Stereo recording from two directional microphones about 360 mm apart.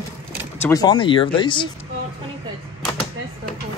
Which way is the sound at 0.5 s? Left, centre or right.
Centre.